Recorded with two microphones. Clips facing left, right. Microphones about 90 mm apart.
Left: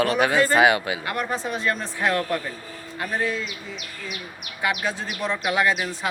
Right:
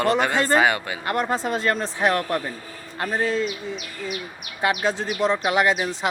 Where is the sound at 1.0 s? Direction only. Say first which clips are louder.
Right 3 dB; 30° right (ahead or behind).